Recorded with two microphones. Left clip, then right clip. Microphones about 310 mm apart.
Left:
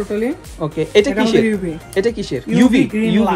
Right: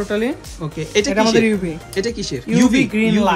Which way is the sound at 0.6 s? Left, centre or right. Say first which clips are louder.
Left 5 dB; centre.